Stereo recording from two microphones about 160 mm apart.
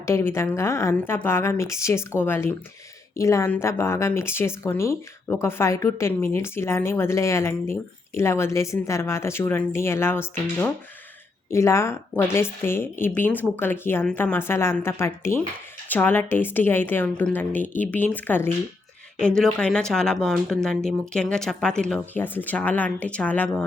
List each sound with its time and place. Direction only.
0.0 s speech: 15° left (ahead or behind)
11.5 s speech: 15° left (ahead or behind)